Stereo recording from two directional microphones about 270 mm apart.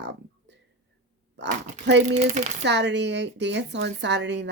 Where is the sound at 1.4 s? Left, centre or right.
Right.